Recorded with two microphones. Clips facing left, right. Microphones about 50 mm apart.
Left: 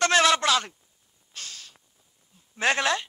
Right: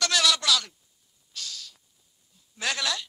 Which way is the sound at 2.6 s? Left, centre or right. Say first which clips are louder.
Left 6 dB; left.